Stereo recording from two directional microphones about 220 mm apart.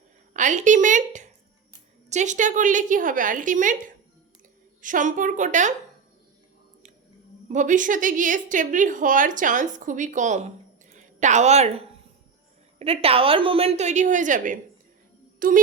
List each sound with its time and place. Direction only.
0.3 s a woman's voice: 35° right (ahead or behind)
7.4 s a woman's voice: 35° right (ahead or behind)